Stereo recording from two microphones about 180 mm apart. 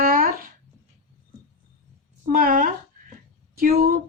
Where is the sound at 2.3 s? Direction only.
50° right (ahead or behind).